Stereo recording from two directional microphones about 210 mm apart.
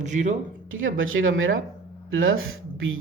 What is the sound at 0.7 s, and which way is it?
Speech, 70° right (ahead or behind).